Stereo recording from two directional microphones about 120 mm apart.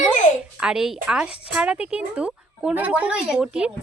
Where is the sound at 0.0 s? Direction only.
90° left.